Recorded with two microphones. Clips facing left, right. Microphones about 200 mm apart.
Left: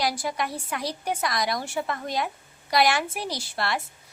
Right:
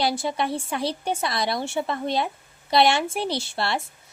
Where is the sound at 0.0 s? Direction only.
25° right (ahead or behind).